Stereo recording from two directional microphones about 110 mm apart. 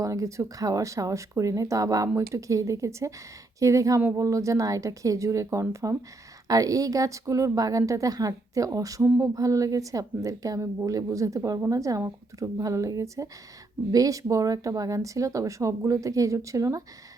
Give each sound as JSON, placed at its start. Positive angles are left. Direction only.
{"t": 0.0, "sound": "a woman's voice", "side_deg": -30}